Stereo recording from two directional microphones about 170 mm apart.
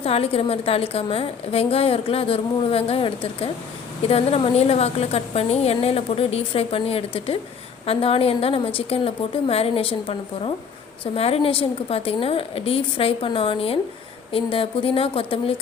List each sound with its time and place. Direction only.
0.0 s a woman's voice: 35° left (ahead or behind)